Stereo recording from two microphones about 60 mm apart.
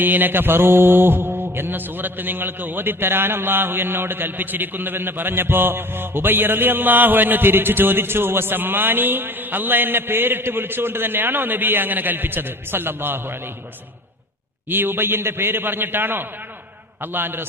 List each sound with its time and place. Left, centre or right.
0.0 s mantra: right
14.7 s mantra: right